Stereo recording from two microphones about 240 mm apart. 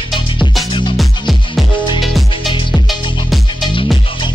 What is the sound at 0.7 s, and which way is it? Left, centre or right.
Music, centre.